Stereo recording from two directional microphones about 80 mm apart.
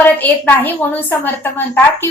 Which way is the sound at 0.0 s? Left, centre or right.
Left.